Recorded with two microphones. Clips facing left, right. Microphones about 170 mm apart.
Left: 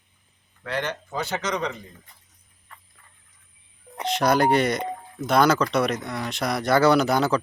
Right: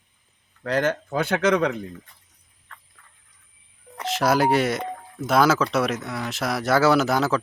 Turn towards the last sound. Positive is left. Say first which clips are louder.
# even
turn(degrees=0)  # may be behind; listen again after turning